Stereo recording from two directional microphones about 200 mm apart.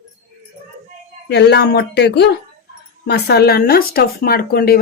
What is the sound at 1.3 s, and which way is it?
Speech, 55° left (ahead or behind).